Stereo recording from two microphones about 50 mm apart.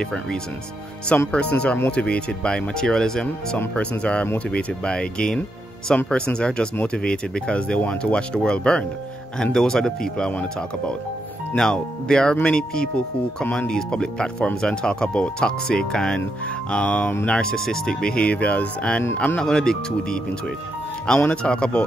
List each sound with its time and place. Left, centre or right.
0.0 s speech: centre
4.0 s speech: left
11.5 s speech: centre; by 13.7 s left
13.7 s speech: centre
19.4 s speech: centre